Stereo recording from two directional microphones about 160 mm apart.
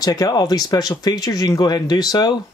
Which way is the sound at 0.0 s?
25° left (ahead or behind).